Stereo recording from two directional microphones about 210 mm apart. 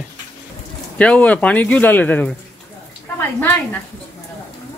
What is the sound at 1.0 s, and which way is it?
Speech, 5° left (ahead or behind).